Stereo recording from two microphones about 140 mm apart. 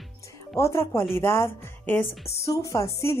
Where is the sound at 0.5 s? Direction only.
20° left (ahead or behind).